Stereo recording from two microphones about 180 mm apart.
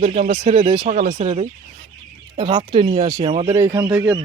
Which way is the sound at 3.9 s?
5° right (ahead or behind).